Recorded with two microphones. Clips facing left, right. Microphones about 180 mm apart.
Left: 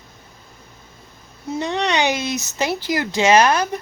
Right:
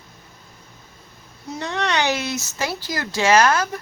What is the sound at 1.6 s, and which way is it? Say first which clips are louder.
Speech: left 3 dB; 15° left (ahead or behind).